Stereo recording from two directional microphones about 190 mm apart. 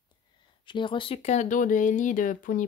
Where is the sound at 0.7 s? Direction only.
25° left (ahead or behind).